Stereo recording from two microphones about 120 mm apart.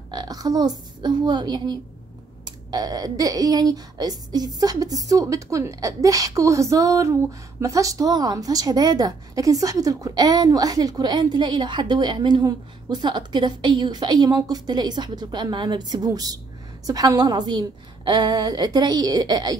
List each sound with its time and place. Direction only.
0.1 s speech: 35° right (ahead or behind)